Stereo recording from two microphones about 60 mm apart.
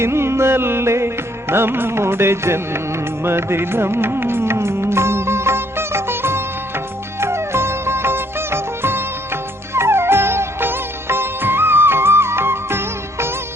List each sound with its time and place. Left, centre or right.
0.0 s music: right